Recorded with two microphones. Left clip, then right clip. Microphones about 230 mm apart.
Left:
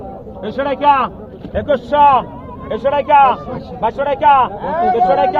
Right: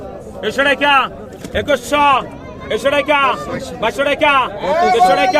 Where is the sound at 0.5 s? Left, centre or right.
Right.